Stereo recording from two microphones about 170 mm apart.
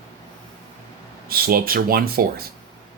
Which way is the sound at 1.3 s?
60° right (ahead or behind).